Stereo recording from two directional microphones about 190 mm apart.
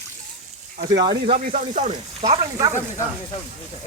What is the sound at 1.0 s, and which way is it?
Speech, 20° right (ahead or behind).